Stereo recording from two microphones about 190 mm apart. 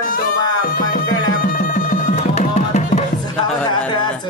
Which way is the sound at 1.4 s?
50° left (ahead or behind).